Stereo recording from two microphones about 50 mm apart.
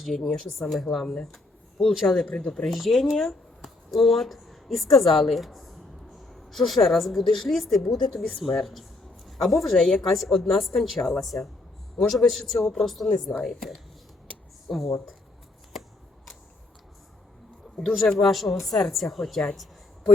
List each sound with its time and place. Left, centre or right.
0.0 s a woman's voice: centre
1.9 s a woman's voice: centre
2.2 s speech: left
2.7 s a woman's voice: centre
8.4 s a sound: centre
9.7 s a woman's voice: centre
17.7 s a woman's voice: centre